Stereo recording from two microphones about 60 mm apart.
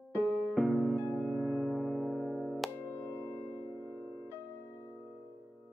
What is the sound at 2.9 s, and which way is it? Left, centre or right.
Singing bowl, left.